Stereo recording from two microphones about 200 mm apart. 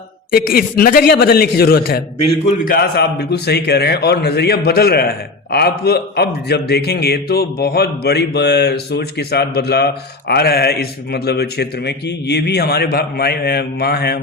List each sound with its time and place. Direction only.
0.3 s a man's voice: 50° left (ahead or behind)